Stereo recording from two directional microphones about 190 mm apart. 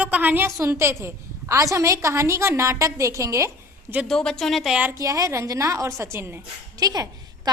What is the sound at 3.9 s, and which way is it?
A woman's voice, centre (ahead or behind).